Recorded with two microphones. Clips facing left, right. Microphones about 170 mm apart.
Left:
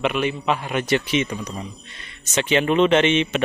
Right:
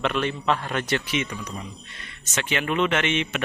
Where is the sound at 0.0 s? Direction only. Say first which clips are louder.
Left 3 dB; 10° left (ahead or behind).